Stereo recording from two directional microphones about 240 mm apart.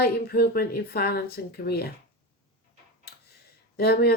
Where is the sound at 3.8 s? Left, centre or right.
Left.